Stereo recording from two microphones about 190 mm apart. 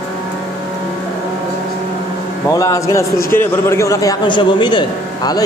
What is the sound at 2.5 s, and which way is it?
A man's voice, 15° left (ahead or behind).